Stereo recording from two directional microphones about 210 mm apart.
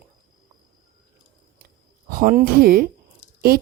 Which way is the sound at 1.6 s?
45° right (ahead or behind).